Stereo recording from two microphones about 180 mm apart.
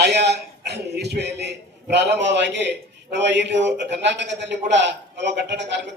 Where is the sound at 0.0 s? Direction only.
70° right (ahead or behind).